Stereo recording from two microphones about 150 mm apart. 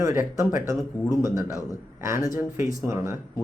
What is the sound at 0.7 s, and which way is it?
Speech, 20° right (ahead or behind).